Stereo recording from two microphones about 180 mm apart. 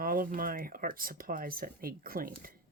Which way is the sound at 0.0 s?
50° right (ahead or behind).